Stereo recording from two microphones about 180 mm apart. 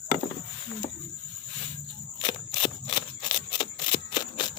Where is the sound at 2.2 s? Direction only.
30° left (ahead or behind).